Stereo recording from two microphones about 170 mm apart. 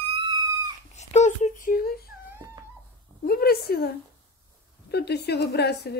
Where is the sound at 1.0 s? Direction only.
40° left (ahead or behind); by 2.0 s 60° left (ahead or behind).